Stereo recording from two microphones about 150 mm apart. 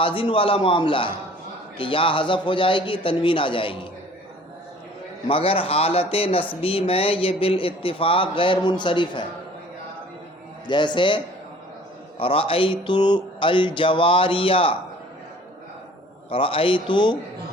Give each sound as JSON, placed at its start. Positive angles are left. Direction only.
{"t": 0.0, "sound": "speech", "side_deg": 35}
{"t": 5.3, "sound": "speech", "side_deg": 40}
{"t": 10.7, "sound": "speech", "side_deg": 30}
{"t": 12.2, "sound": "speech", "side_deg": 40}
{"t": 16.3, "sound": "speech", "side_deg": 35}